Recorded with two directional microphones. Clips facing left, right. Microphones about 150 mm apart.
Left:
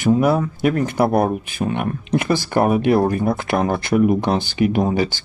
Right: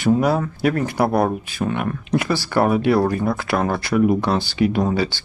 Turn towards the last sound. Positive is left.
turn(degrees=15)  # may be behind; listen again after turning